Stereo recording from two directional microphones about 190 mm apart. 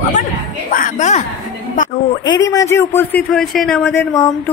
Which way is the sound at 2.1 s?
20° left (ahead or behind).